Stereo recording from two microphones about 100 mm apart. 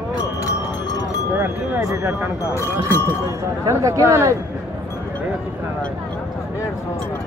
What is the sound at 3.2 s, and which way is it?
Speech, 35° right (ahead or behind).